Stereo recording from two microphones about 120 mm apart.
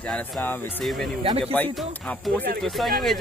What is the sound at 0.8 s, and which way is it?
Speech, 5° left (ahead or behind).